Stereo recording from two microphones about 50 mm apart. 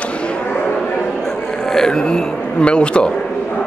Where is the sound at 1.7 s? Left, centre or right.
Centre.